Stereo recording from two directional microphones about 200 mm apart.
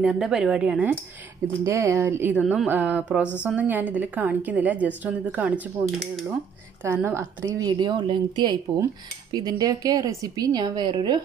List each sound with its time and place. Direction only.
0.0 s a woman's voice: 5° right (ahead or behind)
6.8 s a woman's voice: 15° right (ahead or behind)